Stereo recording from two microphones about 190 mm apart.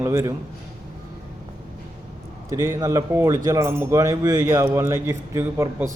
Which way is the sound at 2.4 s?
15° right (ahead or behind).